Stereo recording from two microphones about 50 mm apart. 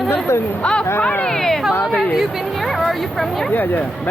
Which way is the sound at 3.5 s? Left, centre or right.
Left.